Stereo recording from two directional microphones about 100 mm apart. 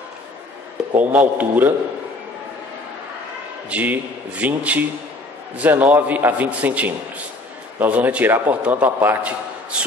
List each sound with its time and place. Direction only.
0.9 s a man's voice: 15° right (ahead or behind)
3.7 s a man's voice: 15° right (ahead or behind)